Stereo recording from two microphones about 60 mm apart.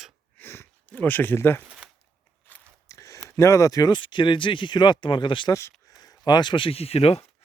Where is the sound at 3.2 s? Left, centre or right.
Left.